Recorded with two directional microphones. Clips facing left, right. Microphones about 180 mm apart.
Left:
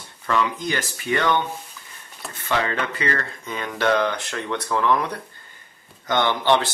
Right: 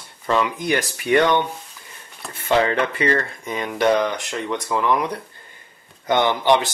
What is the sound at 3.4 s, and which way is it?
Speech, 15° right (ahead or behind).